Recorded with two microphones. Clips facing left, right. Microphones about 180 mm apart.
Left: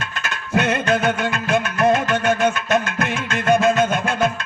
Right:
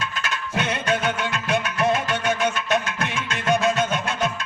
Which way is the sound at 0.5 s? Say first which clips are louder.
Left 6 dB; 50° left (ahead or behind).